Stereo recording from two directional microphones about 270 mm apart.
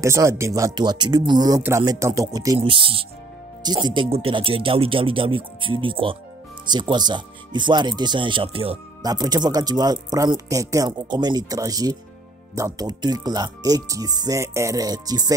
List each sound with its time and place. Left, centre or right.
0.0 s speech: centre